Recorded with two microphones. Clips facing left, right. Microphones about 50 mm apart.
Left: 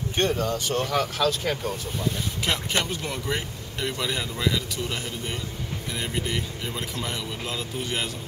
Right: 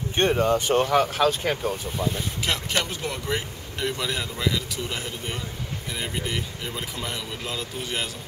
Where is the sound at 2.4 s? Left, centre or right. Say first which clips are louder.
Even; centre.